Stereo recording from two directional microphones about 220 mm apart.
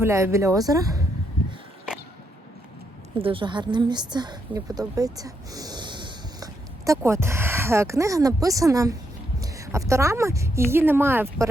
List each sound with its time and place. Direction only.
0.0 s a woman's voice: 10° right (ahead or behind)
3.2 s a woman's voice: 25° right (ahead or behind)